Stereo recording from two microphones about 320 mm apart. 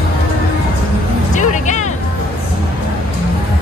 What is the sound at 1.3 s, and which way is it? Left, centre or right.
Music, left.